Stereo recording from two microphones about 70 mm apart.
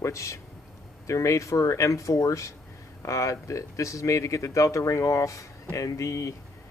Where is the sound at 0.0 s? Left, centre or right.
Left.